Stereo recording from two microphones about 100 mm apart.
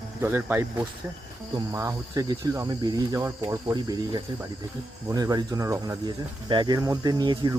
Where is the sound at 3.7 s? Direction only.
45° right (ahead or behind).